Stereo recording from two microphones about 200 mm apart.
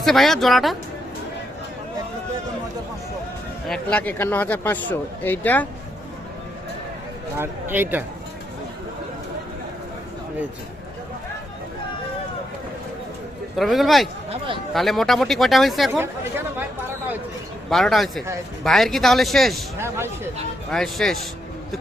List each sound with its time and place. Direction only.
0.0 s speech: centre (ahead or behind)
3.7 s speech: 5° left (ahead or behind)
7.3 s speech: 10° right (ahead or behind)
13.6 s speech: centre (ahead or behind)
14.3 s a sound: 25° right (ahead or behind)
14.7 s speech: centre (ahead or behind)
17.7 s speech: centre (ahead or behind)
20.7 s speech: centre (ahead or behind)